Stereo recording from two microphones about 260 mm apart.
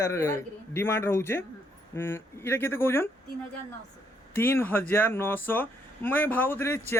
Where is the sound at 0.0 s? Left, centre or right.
Centre.